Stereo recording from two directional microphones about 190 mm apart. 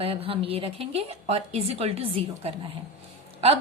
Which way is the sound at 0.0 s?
30° right (ahead or behind).